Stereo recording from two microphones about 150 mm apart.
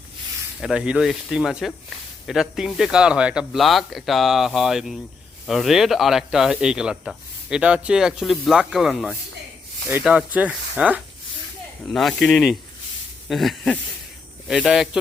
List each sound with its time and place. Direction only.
0.6 s speech: 5° right (ahead or behind)